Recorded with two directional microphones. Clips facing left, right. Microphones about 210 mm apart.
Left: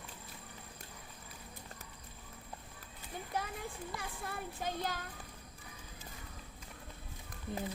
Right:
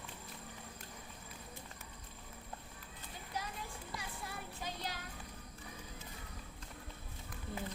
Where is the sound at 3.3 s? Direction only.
55° left (ahead or behind).